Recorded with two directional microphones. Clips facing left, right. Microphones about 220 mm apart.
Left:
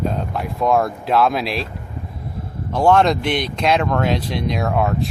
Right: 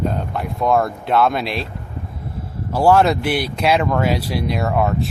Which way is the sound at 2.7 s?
5° right (ahead or behind).